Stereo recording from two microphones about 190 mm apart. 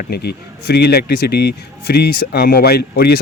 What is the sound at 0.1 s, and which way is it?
Speech, 55° left (ahead or behind).